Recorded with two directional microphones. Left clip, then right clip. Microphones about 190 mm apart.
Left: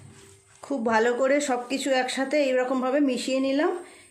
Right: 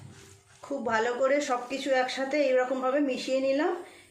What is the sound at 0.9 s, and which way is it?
Speech, 55° left (ahead or behind).